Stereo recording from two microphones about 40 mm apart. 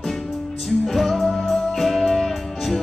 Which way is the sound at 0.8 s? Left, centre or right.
Centre.